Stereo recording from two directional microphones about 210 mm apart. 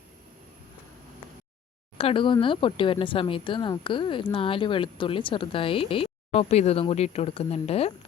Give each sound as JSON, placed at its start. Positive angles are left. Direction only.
{"t": 2.0, "sound": "speech", "side_deg": 25}